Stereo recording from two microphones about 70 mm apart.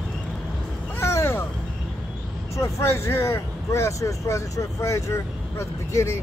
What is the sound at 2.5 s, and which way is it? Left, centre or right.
Speech, left.